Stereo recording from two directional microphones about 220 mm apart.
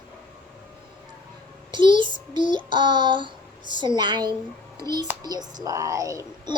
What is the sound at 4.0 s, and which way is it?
A child's voice, 20° right (ahead or behind).